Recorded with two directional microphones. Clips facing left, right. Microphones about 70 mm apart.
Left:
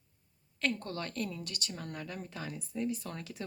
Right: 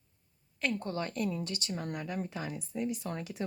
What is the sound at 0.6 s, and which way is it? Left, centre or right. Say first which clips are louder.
A woman's voice: right 2 dB; centre.